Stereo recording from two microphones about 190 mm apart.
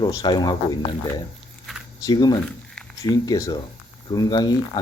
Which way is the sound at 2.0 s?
20° left (ahead or behind).